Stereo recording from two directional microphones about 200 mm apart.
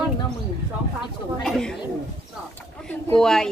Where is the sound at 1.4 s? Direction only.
5° left (ahead or behind).